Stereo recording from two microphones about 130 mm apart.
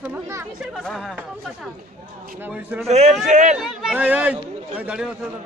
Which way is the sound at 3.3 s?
70° right (ahead or behind).